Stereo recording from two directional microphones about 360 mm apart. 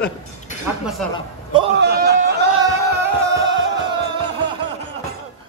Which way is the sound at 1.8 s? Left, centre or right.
Right.